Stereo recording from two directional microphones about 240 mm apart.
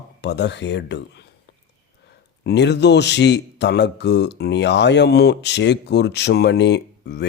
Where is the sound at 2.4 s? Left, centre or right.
Left.